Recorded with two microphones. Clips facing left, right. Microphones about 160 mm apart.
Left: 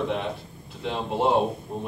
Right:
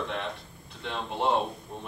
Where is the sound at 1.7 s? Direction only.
35° left (ahead or behind).